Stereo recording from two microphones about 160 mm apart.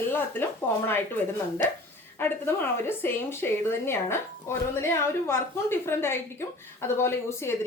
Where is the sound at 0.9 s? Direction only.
15° left (ahead or behind).